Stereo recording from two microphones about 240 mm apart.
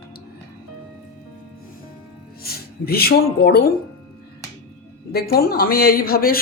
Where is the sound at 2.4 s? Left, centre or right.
Left.